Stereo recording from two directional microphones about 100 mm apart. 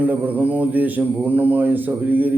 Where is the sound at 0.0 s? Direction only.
15° right (ahead or behind).